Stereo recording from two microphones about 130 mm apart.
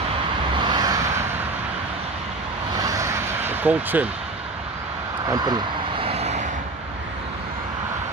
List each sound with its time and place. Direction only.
0.6 s vehicle: 35° right (ahead or behind)
2.8 s vehicle: 25° right (ahead or behind)
5.3 s vehicle: 35° right (ahead or behind)
6.0 s vehicle: 55° right (ahead or behind)